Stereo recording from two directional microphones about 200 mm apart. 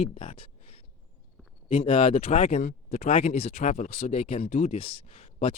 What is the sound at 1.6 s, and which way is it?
Speech, 30° left (ahead or behind).